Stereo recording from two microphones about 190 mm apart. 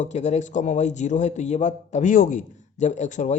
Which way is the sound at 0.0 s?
35° left (ahead or behind).